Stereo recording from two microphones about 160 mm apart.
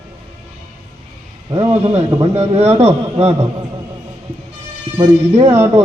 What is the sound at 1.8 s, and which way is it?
A man's voice, 40° right (ahead or behind).